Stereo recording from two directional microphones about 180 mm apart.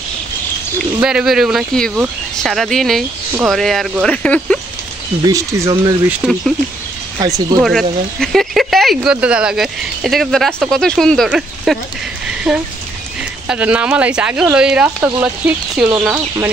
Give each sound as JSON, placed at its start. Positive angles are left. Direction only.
{"t": 1.0, "sound": "speech", "side_deg": 0}
{"t": 5.2, "sound": "speech", "side_deg": -20}
{"t": 6.2, "sound": "speech", "side_deg": -5}
{"t": 7.2, "sound": "speech", "side_deg": -20}
{"t": 7.6, "sound": "speech", "side_deg": 0}
{"t": 15.8, "sound": "speech", "side_deg": 0}